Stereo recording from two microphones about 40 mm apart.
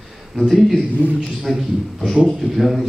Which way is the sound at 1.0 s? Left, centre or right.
Left.